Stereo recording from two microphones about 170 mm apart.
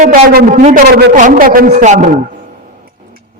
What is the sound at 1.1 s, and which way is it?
A man's voice, 50° right (ahead or behind).